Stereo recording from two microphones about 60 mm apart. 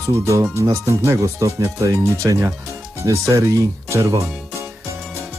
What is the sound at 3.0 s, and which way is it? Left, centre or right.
Speech, right.